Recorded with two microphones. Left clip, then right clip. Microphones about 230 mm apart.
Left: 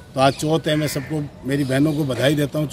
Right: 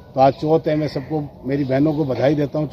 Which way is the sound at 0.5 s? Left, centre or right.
Left.